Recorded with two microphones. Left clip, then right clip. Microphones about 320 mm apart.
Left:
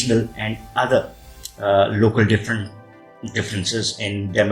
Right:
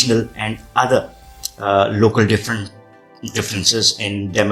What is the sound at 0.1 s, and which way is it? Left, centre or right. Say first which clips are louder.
Speech: right 2 dB; right.